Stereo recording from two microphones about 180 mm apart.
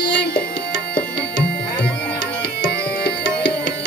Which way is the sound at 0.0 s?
70° left (ahead or behind).